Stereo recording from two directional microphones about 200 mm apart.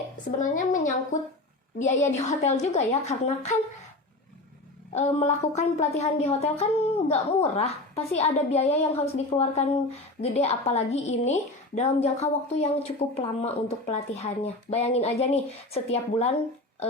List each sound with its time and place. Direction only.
0.3 s a sound: 40° left (ahead or behind)
1.8 s a woman's voice: 35° left (ahead or behind)
4.9 s a woman's voice: 35° left (ahead or behind)